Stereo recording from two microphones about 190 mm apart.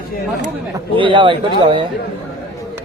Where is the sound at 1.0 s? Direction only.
25° right (ahead or behind).